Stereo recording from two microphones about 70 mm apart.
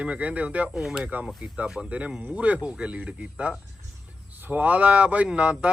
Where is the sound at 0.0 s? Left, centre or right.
Centre.